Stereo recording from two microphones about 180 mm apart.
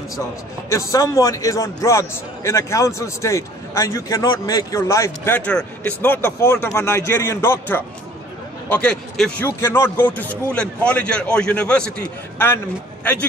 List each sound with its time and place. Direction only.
0.7 s a man's voice: 20° left (ahead or behind)